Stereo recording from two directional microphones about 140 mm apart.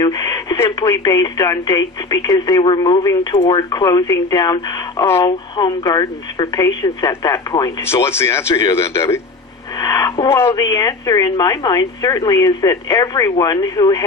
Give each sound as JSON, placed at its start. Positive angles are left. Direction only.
{"t": 0.0, "sound": "a woman's voice", "side_deg": 30}
{"t": 3.4, "sound": "speech", "side_deg": 40}
{"t": 3.8, "sound": "a woman's voice", "side_deg": 25}
{"t": 9.8, "sound": "a sound", "side_deg": 25}
{"t": 10.2, "sound": "a woman's voice", "side_deg": 20}